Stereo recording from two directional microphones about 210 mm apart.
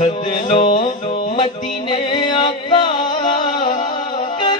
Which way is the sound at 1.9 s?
20° left (ahead or behind).